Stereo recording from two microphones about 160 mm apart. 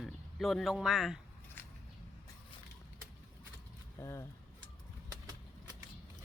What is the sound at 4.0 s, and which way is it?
Speech, 15° left (ahead or behind).